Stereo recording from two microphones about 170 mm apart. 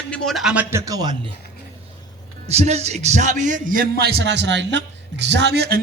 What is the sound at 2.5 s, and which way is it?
A man's voice, 40° right (ahead or behind).